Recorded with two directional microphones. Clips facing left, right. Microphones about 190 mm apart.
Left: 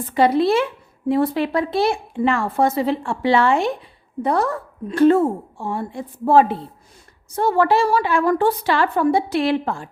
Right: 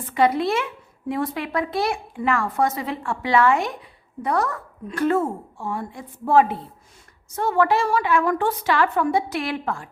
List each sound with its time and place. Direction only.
0.1 s a woman's voice: 30° left (ahead or behind)